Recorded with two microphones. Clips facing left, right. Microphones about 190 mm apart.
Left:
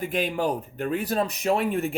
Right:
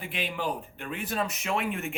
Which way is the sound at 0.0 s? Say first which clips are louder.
Left 7 dB; 45° left (ahead or behind).